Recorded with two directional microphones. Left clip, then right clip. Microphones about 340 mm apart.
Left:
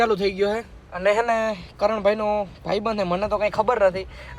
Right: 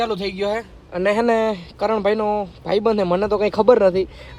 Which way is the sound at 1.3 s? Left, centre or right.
Centre.